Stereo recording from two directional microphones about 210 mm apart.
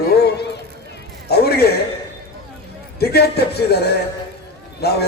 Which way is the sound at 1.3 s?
50° left (ahead or behind).